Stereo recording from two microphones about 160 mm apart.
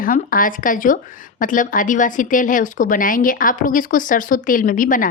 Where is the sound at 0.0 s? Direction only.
60° left (ahead or behind).